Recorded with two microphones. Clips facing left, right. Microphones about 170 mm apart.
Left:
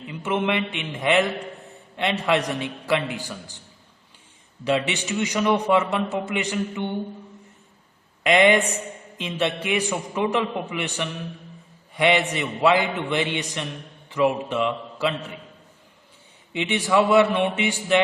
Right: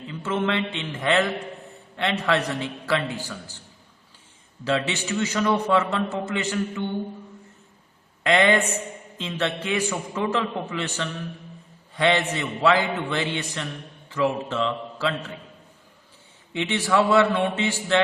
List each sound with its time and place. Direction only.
0.1 s a man's voice: 15° left (ahead or behind)
4.6 s a man's voice: 15° left (ahead or behind)
8.2 s a man's voice: 15° left (ahead or behind)
16.5 s a man's voice: 15° left (ahead or behind)